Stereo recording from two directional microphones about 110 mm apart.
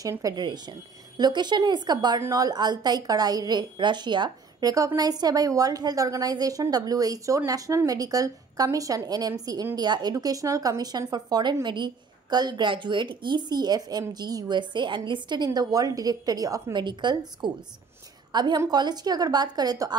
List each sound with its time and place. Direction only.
0.2 s a woman's voice: 40° right (ahead or behind)
16.7 s a woman's voice: 45° right (ahead or behind)